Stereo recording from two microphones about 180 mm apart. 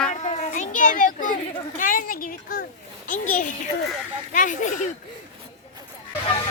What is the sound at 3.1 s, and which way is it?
Speech, 45° left (ahead or behind).